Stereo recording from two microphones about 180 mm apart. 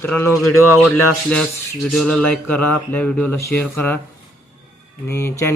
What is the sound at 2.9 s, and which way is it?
A man's voice, 5° left (ahead or behind).